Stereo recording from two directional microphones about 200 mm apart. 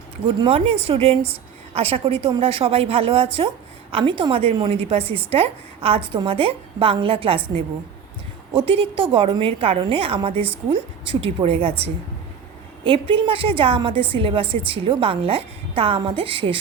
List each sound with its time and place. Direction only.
0.3 s a woman's voice: 25° right (ahead or behind)
12.8 s a woman's voice: 25° right (ahead or behind)